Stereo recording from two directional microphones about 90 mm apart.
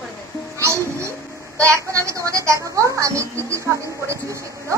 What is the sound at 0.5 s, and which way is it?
Music, 30° right (ahead or behind).